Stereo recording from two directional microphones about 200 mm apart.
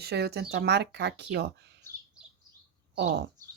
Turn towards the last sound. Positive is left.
turn(degrees=-55)  # may be behind; listen again after turning